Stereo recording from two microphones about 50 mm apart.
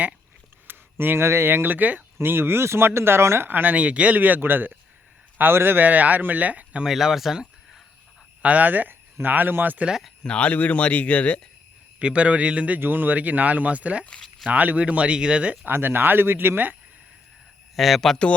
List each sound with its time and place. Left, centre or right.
0.7 s speech: right
2.2 s speech: right
3.4 s speech: right
5.8 s speech: right
6.8 s speech: centre
8.4 s speech: right
10.2 s speech: left
11.9 s speech: right
12.8 s speech: right
15.6 s speech: right
17.7 s speech: centre